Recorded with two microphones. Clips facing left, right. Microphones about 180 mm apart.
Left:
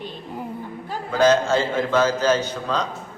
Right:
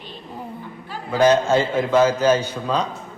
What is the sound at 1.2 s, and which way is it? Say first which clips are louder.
A man's voice: right 1 dB; 15° right (ahead or behind).